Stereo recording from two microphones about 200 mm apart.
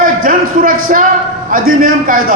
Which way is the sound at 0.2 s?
45° right (ahead or behind).